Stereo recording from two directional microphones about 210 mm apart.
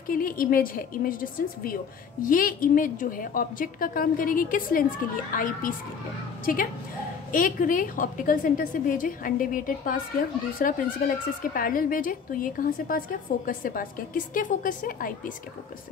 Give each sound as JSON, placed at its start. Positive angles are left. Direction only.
{"t": 0.0, "sound": "a woman's voice", "side_deg": 40}